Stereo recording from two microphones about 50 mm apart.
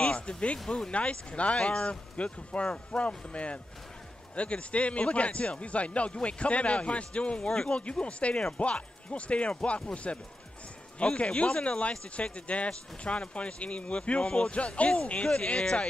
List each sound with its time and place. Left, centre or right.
0.0 s music: left
0.7 s speech: centre
0.9 s speech: left